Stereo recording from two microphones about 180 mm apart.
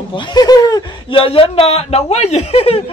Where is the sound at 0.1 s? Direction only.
25° left (ahead or behind).